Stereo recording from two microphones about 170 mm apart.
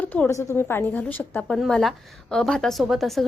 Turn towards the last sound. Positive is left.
turn(degrees=0)  # may be behind; listen again after turning